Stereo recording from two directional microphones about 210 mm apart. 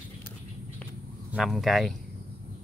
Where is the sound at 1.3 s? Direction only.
Centre (ahead or behind).